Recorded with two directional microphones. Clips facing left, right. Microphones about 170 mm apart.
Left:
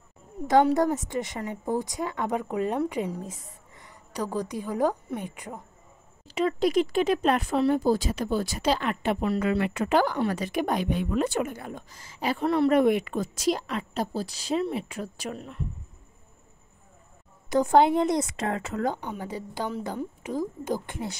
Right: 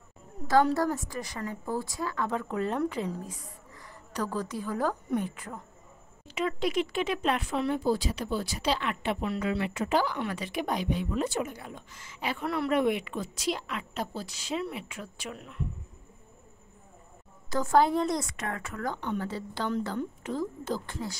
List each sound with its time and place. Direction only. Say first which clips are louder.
0.7 s a woman's voice: left 4 dB; 20° left (ahead or behind)
4.1 s a woman's voice: left 2 dB; 15° left (ahead or behind)
6.2 s speech: left 5 dB; 35° left (ahead or behind); by 10.1 s 60° left (ahead or behind)
10.1 s speech: left 6 dB; 40° left (ahead or behind)
17.5 s a woman's voice: left 4 dB; 20° left (ahead or behind)
18.9 s a woman's voice: right 1 dB; 10° left (ahead or behind)